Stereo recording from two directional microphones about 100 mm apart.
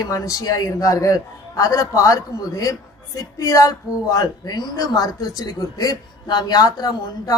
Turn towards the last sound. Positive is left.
turn(degrees=40)  # may be behind; listen again after turning